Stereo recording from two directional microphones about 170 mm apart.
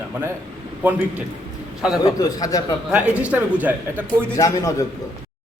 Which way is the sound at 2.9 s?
10° right (ahead or behind).